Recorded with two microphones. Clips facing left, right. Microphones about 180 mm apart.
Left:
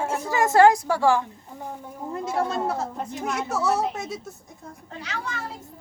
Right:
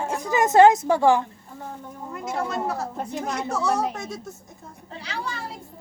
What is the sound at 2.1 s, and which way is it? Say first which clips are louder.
Speech: left 3 dB; 30° left (ahead or behind).